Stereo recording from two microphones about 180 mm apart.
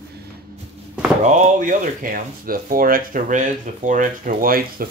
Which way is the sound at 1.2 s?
40° right (ahead or behind).